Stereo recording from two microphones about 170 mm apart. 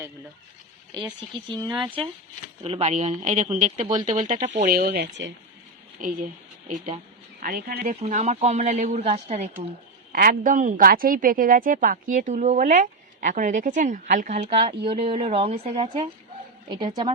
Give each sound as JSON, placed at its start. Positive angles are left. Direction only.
{"t": 1.5, "sound": "a woman's voice", "side_deg": -25}
{"t": 2.6, "sound": "a woman's voice", "side_deg": -40}
{"t": 7.4, "sound": "a woman's voice", "side_deg": -60}
{"t": 8.0, "sound": "a woman's voice", "side_deg": -45}
{"t": 10.1, "sound": "a woman's voice", "side_deg": -55}